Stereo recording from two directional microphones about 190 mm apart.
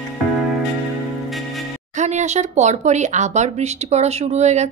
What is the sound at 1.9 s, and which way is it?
Speech, 40° right (ahead or behind).